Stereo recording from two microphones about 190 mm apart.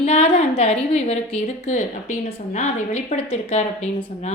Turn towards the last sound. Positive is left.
turn(degrees=30)  # may be behind; listen again after turning